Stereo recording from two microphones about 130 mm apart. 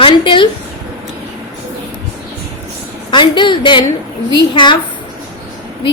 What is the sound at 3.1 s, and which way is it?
A woman's voice, 35° left (ahead or behind).